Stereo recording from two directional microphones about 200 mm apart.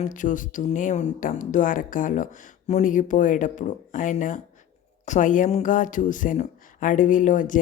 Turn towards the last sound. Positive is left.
turn(degrees=40)  # may be behind; listen again after turning